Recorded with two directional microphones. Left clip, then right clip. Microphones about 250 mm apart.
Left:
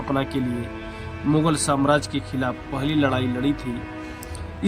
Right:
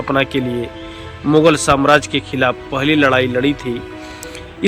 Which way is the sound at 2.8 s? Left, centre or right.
Centre.